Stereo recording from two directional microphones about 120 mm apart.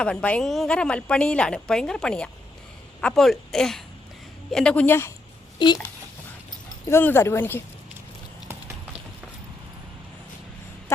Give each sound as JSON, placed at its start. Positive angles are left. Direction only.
{"t": 0.0, "sound": "a woman's voice", "side_deg": 10}
{"t": 5.6, "sound": "a child's voice", "side_deg": 40}
{"t": 6.8, "sound": "speech", "side_deg": 20}